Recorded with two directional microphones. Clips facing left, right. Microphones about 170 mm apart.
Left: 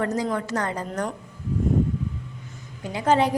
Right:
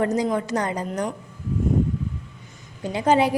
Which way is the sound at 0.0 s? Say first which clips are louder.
Right 3 dB; 15° right (ahead or behind).